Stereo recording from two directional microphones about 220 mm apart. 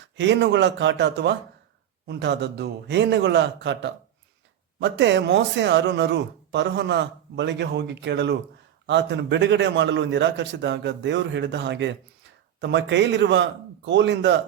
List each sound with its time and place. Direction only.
0.2 s speech: 55° right (ahead or behind)